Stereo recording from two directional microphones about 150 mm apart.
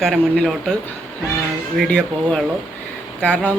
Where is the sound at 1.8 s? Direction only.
5° left (ahead or behind).